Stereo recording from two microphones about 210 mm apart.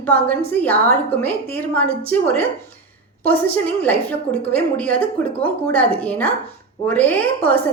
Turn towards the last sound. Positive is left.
turn(degrees=10)  # may be behind; listen again after turning